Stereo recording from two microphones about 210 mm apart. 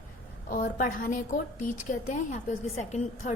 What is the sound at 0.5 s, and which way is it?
A woman's voice, 40° left (ahead or behind).